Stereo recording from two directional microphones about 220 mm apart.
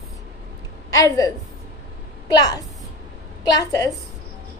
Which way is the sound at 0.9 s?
15° left (ahead or behind).